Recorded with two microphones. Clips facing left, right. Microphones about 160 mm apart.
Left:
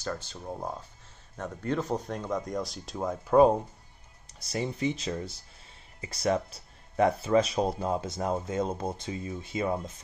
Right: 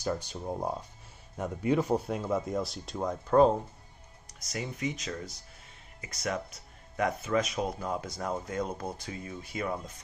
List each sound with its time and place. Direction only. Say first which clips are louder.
0.0 s speech: right 3 dB; 15° right (ahead or behind); by 3.5 s 10° left (ahead or behind)
4.3 s speech: left 5 dB; 30° left (ahead or behind)